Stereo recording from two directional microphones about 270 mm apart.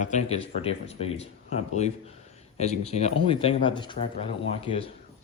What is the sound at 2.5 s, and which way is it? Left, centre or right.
Speech, left.